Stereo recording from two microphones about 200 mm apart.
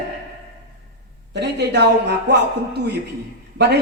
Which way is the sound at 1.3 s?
55° right (ahead or behind).